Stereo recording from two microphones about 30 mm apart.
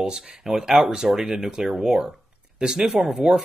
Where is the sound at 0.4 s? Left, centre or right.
Centre.